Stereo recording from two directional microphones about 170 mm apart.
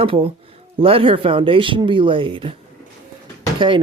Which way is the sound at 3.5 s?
30° right (ahead or behind).